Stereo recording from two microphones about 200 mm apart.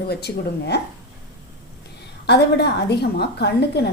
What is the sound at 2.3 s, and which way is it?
A woman's voice, 55° left (ahead or behind).